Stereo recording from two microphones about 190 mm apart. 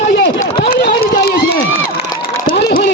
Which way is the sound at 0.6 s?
55° left (ahead or behind).